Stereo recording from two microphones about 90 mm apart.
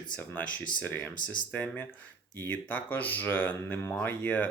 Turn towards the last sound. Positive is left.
turn(degrees=20)  # may be behind; listen again after turning